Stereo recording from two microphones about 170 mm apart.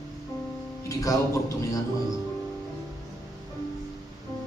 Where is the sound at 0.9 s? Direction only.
20° left (ahead or behind).